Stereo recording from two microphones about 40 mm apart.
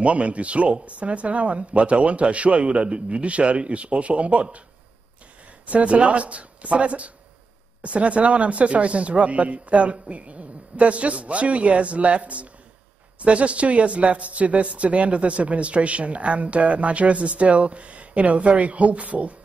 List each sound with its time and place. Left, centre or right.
0.0 s speech: right
5.7 s speech: right